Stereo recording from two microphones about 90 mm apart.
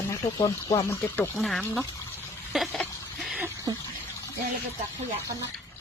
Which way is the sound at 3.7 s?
50° right (ahead or behind).